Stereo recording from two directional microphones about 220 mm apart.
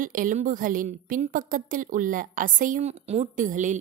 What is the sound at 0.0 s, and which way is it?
A woman's voice, 35° right (ahead or behind).